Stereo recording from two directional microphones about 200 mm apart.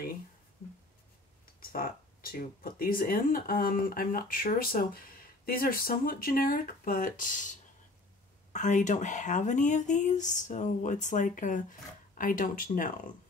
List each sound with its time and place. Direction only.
1.6 s speech: 45° left (ahead or behind)
8.5 s speech: 35° left (ahead or behind)